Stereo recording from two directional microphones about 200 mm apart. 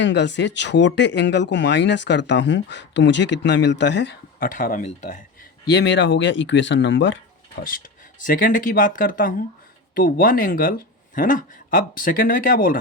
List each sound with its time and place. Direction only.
0.0 s speech: 60° left (ahead or behind)
4.4 s speech: 40° left (ahead or behind)
5.7 s speech: 60° left (ahead or behind)
8.2 s speech: 45° left (ahead or behind)